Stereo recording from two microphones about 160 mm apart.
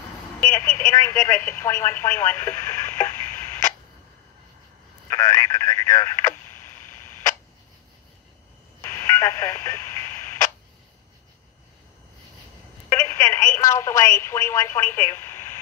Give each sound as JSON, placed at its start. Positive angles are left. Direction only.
{"t": 0.5, "sound": "telephone", "side_deg": 15}
{"t": 5.1, "sound": "radio", "side_deg": 20}
{"t": 8.8, "sound": "radio", "side_deg": 20}
{"t": 12.9, "sound": "telephone", "side_deg": 15}